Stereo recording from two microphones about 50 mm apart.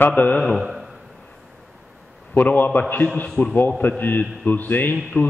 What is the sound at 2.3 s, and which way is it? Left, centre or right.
Speech, left.